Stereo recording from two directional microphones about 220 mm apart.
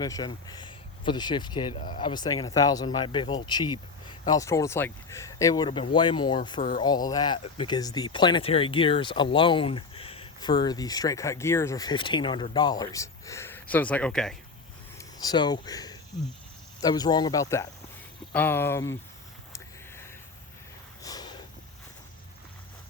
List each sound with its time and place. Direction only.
0.0 s speech: 20° left (ahead or behind); by 14.3 s 5° left (ahead or behind)
14.9 s a sound: 15° left (ahead or behind)
16.8 s speech: 20° left (ahead or behind)
21.0 s snort: 15° left (ahead or behind)